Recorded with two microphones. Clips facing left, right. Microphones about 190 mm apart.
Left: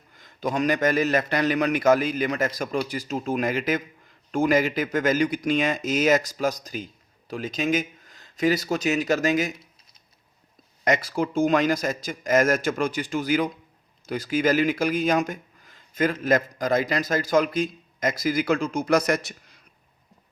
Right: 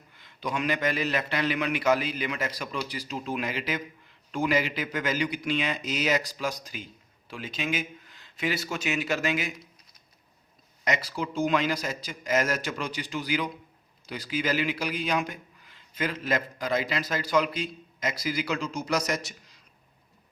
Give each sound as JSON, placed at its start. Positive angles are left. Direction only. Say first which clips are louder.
{"t": 0.1, "sound": "speech", "louder": "left 5 dB", "side_deg": 45}
{"t": 10.8, "sound": "speech", "louder": "left 6 dB", "side_deg": 50}